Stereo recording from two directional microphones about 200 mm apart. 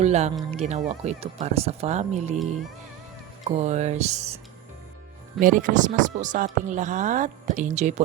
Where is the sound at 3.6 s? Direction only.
35° right (ahead or behind).